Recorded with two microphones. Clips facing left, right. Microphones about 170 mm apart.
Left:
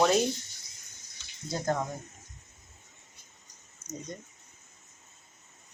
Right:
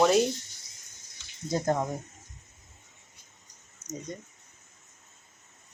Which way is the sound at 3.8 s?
45° right (ahead or behind).